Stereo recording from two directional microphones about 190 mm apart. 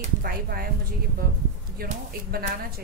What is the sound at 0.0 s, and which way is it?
Speech, 50° right (ahead or behind).